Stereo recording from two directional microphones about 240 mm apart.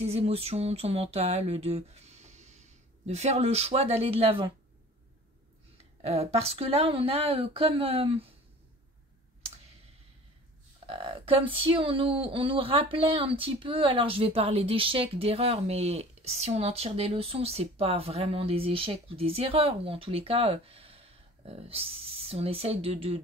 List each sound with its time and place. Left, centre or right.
0.0 s speech: right
6.0 s speech: right
10.9 s speech: right